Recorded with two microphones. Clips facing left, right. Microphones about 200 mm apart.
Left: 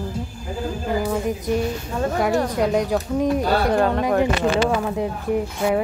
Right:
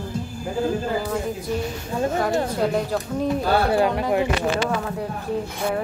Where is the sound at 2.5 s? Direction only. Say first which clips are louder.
Left 2 dB; 15° left (ahead or behind).